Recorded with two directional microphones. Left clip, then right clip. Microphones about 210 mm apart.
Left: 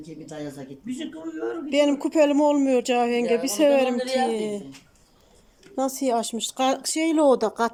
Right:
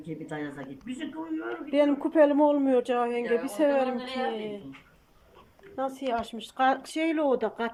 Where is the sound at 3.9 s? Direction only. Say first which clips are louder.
Left 9 dB; 60° left (ahead or behind).